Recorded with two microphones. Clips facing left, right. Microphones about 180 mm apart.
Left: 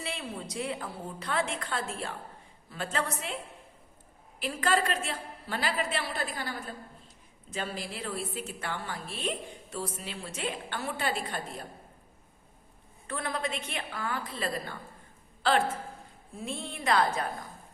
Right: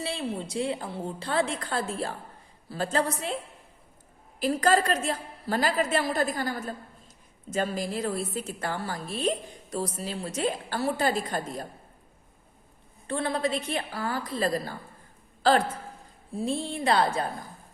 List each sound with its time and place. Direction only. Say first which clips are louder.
0.0 s a woman's voice: right 6 dB; 30° right (ahead or behind)
4.4 s a woman's voice: right 5 dB; 40° right (ahead or behind)
13.1 s a woman's voice: right 6 dB; 30° right (ahead or behind)